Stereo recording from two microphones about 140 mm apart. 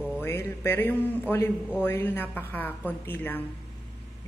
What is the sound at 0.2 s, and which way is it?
A woman's voice, 15° left (ahead or behind).